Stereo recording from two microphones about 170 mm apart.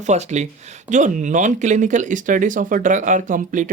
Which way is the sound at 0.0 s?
40° right (ahead or behind).